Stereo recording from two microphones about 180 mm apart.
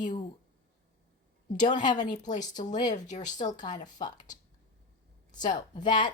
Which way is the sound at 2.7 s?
45° left (ahead or behind).